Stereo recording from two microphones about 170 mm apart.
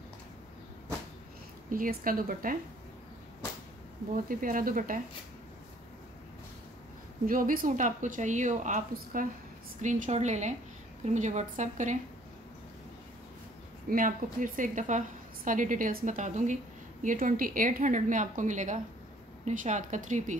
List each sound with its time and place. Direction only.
1.7 s a woman's voice: 55° right (ahead or behind)
4.3 s a woman's voice: 55° right (ahead or behind)
7.2 s a woman's voice: 55° right (ahead or behind)
13.8 s a woman's voice: 55° right (ahead or behind)